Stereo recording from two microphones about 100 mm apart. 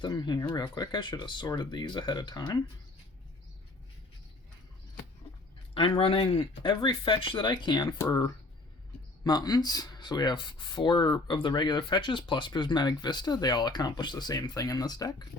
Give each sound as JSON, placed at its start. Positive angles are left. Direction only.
{"t": 0.0, "sound": "speech", "side_deg": 45}
{"t": 5.7, "sound": "speech", "side_deg": 60}